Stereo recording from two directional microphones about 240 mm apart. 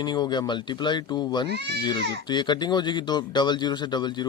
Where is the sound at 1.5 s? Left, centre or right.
Right.